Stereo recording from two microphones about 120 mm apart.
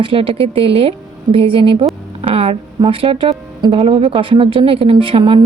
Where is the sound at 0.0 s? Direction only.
50° right (ahead or behind).